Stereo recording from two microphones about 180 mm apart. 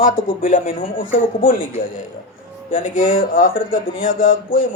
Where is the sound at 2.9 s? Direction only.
45° left (ahead or behind).